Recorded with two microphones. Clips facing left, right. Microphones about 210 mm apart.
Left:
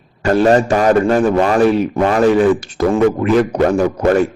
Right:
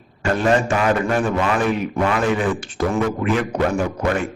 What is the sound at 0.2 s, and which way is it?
Speech, 35° left (ahead or behind).